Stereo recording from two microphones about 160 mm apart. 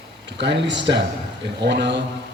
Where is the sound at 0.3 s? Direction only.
90° right.